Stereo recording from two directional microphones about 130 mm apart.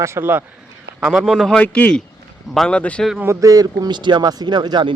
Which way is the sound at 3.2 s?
25° right (ahead or behind).